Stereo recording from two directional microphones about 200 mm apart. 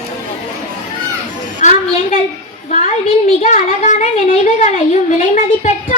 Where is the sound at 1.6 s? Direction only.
35° left (ahead or behind).